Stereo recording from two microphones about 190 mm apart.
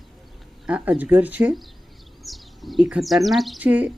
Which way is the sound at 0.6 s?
5° right (ahead or behind).